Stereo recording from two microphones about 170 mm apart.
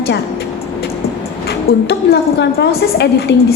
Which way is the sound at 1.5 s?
75° left (ahead or behind).